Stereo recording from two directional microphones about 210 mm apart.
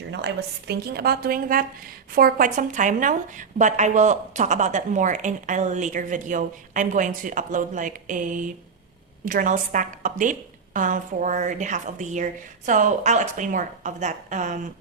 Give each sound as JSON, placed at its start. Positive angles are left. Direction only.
{"t": 0.1, "sound": "a woman's voice", "side_deg": -55}